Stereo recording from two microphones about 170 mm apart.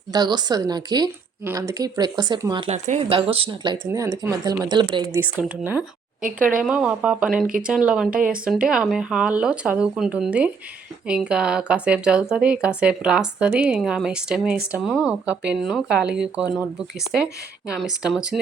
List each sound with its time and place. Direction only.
0.1 s speech: 25° right (ahead or behind)
2.6 s speech: 45° right (ahead or behind)
3.1 s speech: 30° right (ahead or behind)
3.8 s speech: 15° right (ahead or behind)
5.1 s speech: 10° right (ahead or behind)
17.7 s speech: 5° right (ahead or behind)